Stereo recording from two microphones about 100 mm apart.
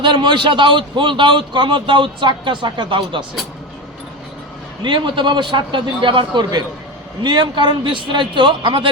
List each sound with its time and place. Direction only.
0.0 s a man's voice: 50° right (ahead or behind)
4.8 s a man's voice: 50° right (ahead or behind)